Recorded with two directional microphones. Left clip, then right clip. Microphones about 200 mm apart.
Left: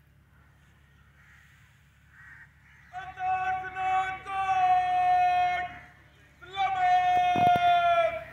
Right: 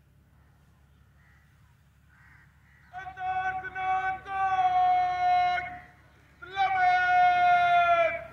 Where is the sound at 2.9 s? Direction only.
20° left (ahead or behind).